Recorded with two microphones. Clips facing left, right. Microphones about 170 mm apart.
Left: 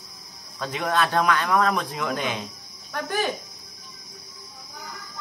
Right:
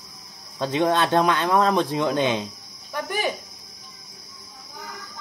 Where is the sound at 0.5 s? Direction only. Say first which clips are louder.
Right 4 dB; 30° right (ahead or behind).